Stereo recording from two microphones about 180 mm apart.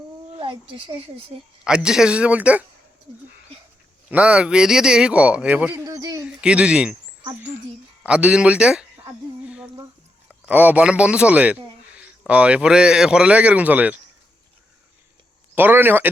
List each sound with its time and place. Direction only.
0.3 s a woman's voice: 30° right (ahead or behind)
1.6 s speech: 5° right (ahead or behind)
4.1 s speech: 5° right (ahead or behind)
5.8 s a sound: 20° right (ahead or behind)
6.2 s speech: 5° right (ahead or behind)
8.0 s speech: 5° right (ahead or behind)
9.4 s a sound: 5° right (ahead or behind)
10.4 s speech: 10° right (ahead or behind)
15.5 s speech: 10° right (ahead or behind)